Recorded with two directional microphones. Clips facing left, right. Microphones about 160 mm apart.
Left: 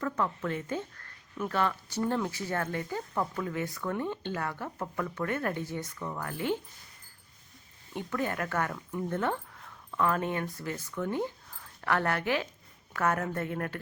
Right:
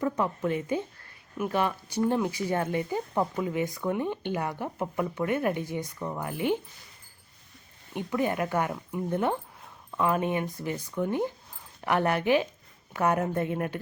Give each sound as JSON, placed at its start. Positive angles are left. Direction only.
{"t": 0.0, "sound": "speech", "side_deg": -15}
{"t": 7.9, "sound": "speech", "side_deg": -15}